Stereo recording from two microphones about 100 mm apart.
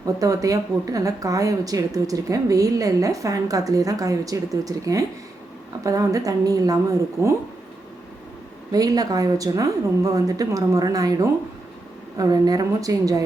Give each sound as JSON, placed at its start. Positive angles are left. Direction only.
{"t": 0.0, "sound": "speech", "side_deg": -35}
{"t": 8.7, "sound": "speech", "side_deg": -40}